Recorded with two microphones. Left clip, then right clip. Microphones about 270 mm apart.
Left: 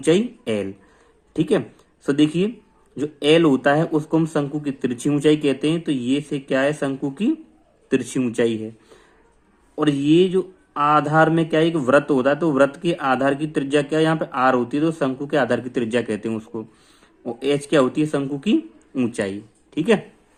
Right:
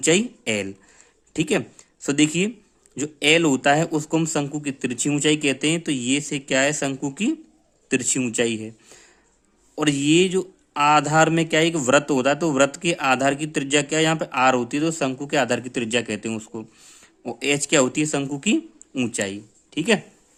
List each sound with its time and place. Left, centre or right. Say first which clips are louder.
0.0 s speech: left 1 dB; right
8.2 s a man's voice: left 2 dB; right
8.5 s speech: left 3 dB; right